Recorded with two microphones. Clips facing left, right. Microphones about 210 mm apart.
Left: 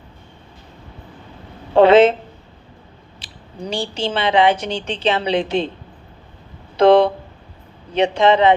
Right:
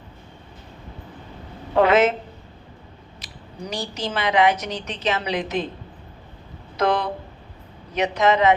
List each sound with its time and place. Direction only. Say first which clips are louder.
1.7 s a woman's voice: left 6 dB; 30° left (ahead or behind)
3.2 s a woman's voice: left 4 dB; 30° left (ahead or behind)
6.7 s a woman's voice: left 10 dB; 30° left (ahead or behind)